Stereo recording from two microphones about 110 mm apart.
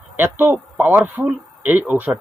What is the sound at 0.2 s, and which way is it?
Speech, 20° right (ahead or behind).